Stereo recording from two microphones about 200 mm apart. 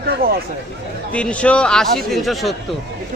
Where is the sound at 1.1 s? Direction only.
5° left (ahead or behind).